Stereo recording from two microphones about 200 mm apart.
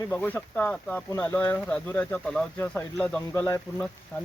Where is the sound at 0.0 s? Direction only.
10° left (ahead or behind).